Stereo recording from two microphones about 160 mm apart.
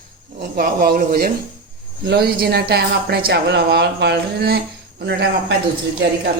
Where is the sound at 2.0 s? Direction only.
85° right.